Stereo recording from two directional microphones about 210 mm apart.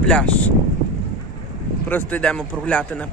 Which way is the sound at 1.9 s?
10° left (ahead or behind).